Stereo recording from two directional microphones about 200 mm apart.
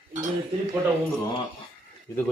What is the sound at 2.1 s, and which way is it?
Speech, 15° left (ahead or behind).